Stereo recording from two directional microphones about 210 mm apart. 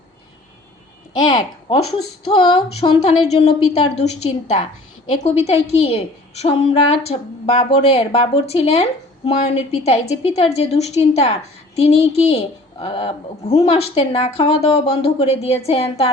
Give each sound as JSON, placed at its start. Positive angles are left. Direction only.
{"t": 2.2, "sound": "a woman's voice", "side_deg": 25}